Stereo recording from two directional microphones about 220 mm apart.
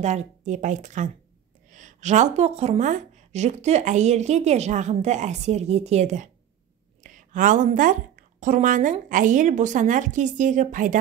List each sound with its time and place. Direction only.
0.0 s a woman's voice: 30° right (ahead or behind)